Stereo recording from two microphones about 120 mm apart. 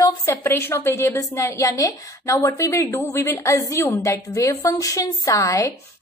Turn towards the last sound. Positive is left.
turn(degrees=25)  # may be behind; listen again after turning